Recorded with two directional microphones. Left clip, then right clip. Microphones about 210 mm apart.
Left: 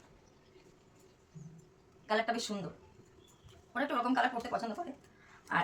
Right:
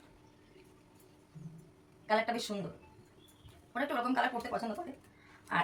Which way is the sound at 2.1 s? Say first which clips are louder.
Right 1 dB; 15° left (ahead or behind).